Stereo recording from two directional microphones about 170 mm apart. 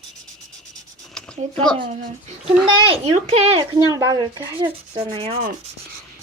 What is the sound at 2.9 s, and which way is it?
Speech, 40° right (ahead or behind).